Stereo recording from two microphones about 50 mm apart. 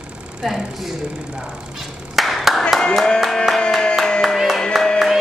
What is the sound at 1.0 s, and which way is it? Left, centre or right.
Speech, centre.